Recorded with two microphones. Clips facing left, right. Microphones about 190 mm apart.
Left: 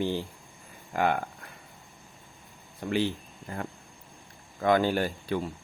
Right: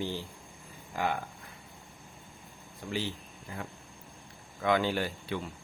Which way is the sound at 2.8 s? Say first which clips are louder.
Left 7 dB; 60° left (ahead or behind).